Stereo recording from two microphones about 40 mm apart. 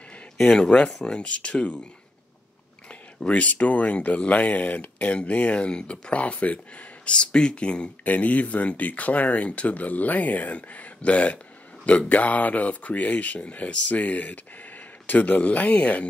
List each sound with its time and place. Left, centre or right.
0.4 s speech: left
3.3 s speech: left
8.1 s speech: left